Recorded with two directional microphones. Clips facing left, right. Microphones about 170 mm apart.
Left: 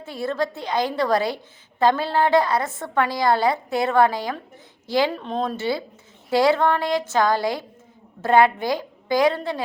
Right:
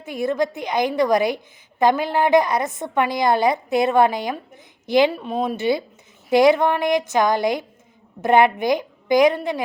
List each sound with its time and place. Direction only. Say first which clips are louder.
0.0 s a woman's voice: right 3 dB; 15° right (ahead or behind)